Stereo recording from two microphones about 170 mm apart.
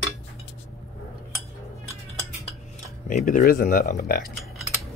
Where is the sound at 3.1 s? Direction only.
50° left (ahead or behind).